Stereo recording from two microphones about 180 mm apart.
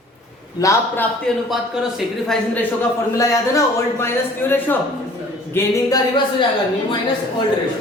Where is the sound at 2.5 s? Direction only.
15° left (ahead or behind).